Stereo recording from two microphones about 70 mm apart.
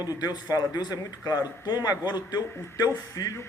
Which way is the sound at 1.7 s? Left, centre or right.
Left.